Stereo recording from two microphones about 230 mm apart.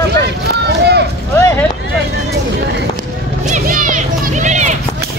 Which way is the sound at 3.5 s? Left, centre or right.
Right.